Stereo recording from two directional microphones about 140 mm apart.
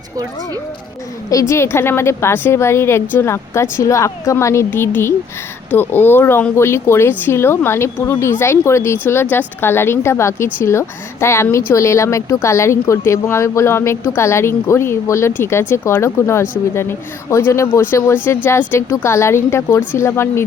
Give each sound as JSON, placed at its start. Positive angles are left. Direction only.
{"t": 1.3, "sound": "a woman's voice", "side_deg": 20}